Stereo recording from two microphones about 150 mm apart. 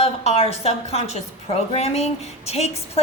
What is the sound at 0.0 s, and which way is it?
A woman's voice, 45° left (ahead or behind).